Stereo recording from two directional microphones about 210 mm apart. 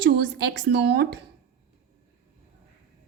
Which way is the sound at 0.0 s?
55° right (ahead or behind).